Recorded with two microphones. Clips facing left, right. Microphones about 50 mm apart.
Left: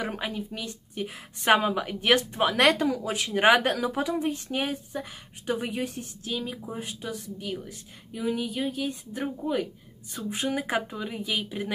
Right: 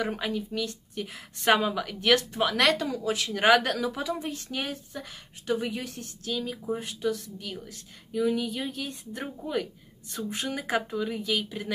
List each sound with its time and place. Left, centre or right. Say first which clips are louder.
0.1 s a woman's voice: right 2 dB; centre